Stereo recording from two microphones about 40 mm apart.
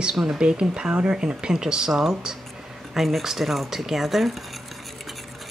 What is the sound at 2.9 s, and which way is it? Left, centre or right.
Speech, centre.